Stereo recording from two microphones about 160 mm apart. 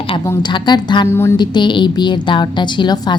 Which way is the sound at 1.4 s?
30° left (ahead or behind).